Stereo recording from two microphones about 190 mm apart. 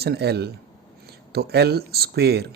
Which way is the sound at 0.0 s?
60° right (ahead or behind).